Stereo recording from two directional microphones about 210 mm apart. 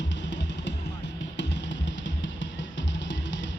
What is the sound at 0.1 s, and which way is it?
Music, 60° left (ahead or behind).